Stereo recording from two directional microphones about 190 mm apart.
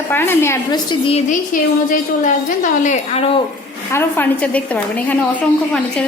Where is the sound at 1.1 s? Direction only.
45° left (ahead or behind).